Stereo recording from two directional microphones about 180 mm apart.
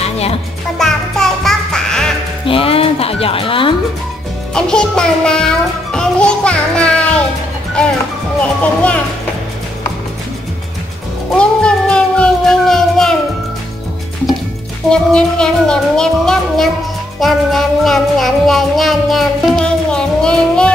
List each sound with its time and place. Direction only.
0.0 s music: 35° left (ahead or behind)
0.7 s music: 5° left (ahead or behind)
2.4 s speech: 30° left (ahead or behind)
4.6 s music: 5° left (ahead or behind)
11.3 s cat: 5° left (ahead or behind)
14.9 s music: 5° left (ahead or behind)